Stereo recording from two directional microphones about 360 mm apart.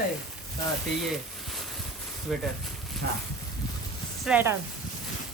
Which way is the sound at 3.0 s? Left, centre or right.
Right.